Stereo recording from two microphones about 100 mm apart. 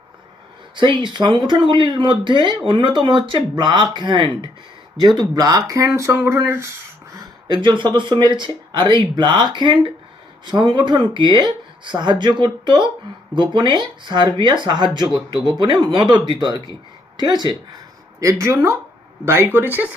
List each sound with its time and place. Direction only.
0.8 s speech: 50° right (ahead or behind)
5.0 s speech: 40° right (ahead or behind); by 6.7 s 25° right (ahead or behind)
7.4 s speech: 50° right (ahead or behind)
18.2 s speech: 30° right (ahead or behind); by 20.0 s 15° right (ahead or behind)